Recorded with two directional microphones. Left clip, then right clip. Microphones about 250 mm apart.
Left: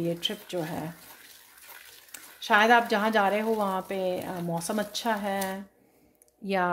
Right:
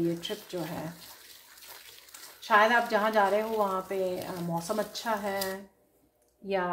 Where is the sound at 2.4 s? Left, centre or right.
Left.